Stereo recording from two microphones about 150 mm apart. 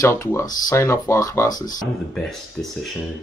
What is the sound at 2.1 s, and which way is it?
Speech, 5° left (ahead or behind).